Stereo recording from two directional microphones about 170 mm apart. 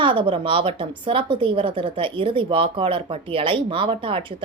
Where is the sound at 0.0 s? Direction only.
30° right (ahead or behind).